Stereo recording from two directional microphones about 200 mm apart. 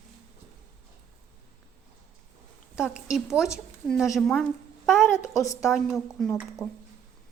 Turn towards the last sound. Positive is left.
turn(degrees=10)  # may be behind; listen again after turning